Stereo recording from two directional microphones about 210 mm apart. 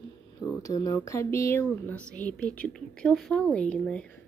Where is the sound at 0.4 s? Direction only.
15° left (ahead or behind).